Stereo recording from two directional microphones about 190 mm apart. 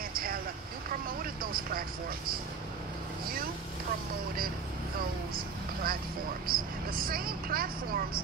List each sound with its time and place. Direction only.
0.1 s vehicle: 50° right (ahead or behind)
4.9 s vehicle: 50° right (ahead or behind)
6.4 s speech: 50° right (ahead or behind)